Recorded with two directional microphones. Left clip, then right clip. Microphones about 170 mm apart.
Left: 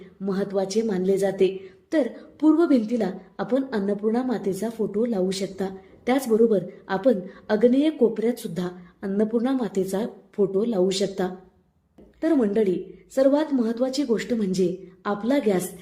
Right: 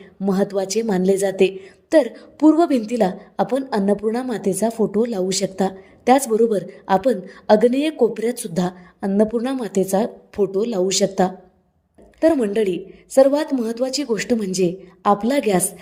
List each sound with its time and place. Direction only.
0.0 s a woman's voice: 40° right (ahead or behind)